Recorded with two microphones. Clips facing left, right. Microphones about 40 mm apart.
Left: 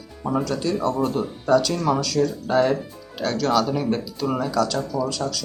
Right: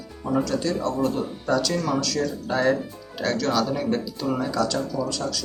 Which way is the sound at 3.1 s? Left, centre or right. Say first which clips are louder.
Left 2 dB; centre.